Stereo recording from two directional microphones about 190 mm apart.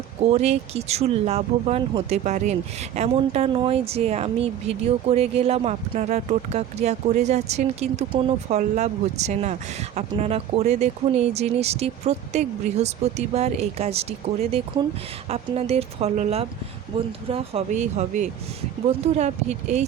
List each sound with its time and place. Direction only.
0.2 s speech: 35° right (ahead or behind)